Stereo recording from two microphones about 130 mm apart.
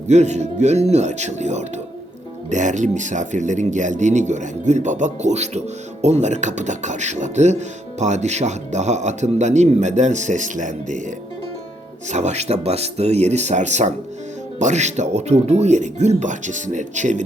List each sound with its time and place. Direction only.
0.1 s speech: 60° right (ahead or behind)